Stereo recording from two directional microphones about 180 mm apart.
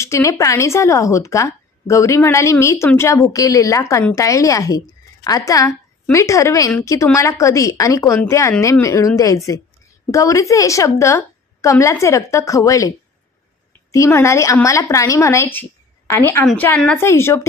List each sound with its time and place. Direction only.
0.0 s a woman's voice: 15° left (ahead or behind)
13.9 s speech: 15° left (ahead or behind)